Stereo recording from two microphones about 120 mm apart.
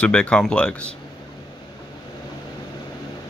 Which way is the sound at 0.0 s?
10° left (ahead or behind).